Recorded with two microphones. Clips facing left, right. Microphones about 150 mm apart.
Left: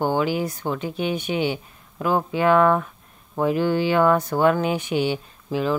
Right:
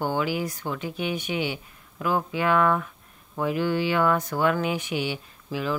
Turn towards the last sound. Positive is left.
turn(degrees=30)  # may be behind; listen again after turning